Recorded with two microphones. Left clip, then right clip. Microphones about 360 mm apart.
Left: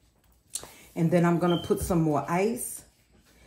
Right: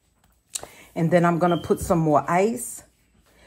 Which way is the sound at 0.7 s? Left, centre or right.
Centre.